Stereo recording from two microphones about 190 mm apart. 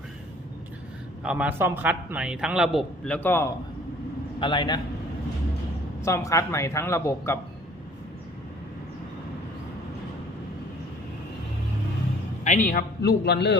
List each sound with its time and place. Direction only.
1.2 s a man's voice: 5° right (ahead or behind); by 3.5 s 10° left (ahead or behind)
4.4 s a man's voice: 25° left (ahead or behind)
6.0 s speech: 15° left (ahead or behind)
12.5 s a man's voice: 40° left (ahead or behind); by 13.6 s 60° left (ahead or behind)